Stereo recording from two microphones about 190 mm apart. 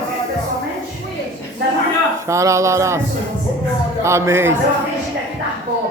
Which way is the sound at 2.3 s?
15° right (ahead or behind).